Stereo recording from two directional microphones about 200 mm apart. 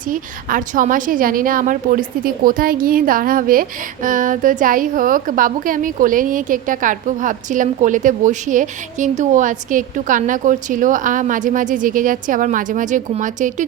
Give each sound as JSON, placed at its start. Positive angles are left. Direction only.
{"t": 0.1, "sound": "a woman's voice", "side_deg": -45}